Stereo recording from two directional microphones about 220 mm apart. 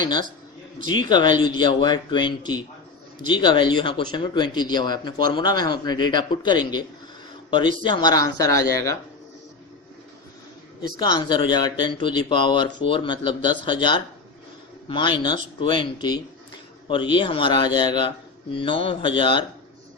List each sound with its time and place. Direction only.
0.0 s speech: 20° left (ahead or behind)
10.8 s speech: 20° left (ahead or behind)